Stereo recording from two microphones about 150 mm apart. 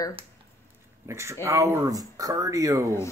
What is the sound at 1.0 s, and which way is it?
Speech, 20° right (ahead or behind).